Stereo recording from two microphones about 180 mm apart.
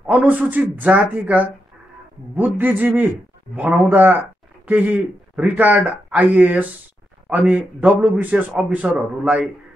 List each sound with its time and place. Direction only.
0.0 s a man's voice: 10° right (ahead or behind)